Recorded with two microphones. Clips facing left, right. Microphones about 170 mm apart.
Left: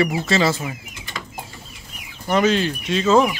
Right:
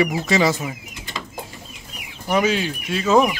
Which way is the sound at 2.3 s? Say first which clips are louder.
Left 2 dB; 10° right (ahead or behind).